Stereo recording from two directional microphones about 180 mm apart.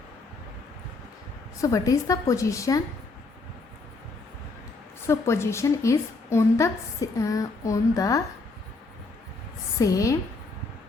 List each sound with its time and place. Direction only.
1.6 s a woman's voice: 20° left (ahead or behind)
5.0 s a woman's voice: 15° left (ahead or behind)
9.7 s a woman's voice: 20° left (ahead or behind)